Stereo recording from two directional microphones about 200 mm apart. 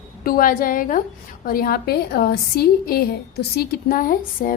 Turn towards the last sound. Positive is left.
turn(degrees=45)  # may be behind; listen again after turning